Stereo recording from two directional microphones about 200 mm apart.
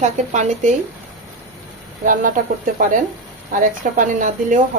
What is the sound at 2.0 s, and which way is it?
Speech, 40° right (ahead or behind).